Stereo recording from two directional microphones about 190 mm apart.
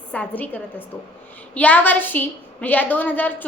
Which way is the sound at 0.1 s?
5° left (ahead or behind).